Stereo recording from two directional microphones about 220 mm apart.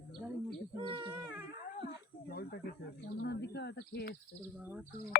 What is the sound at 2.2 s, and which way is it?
Snake, 45° left (ahead or behind).